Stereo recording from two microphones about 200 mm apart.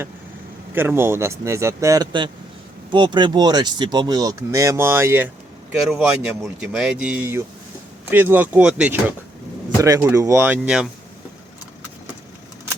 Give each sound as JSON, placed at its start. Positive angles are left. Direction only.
{"t": 0.7, "sound": "speech", "side_deg": -10}
{"t": 5.9, "sound": "speech", "side_deg": 0}